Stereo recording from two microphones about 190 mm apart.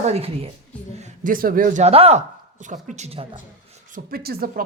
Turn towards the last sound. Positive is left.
turn(degrees=-55)  # may be behind; listen again after turning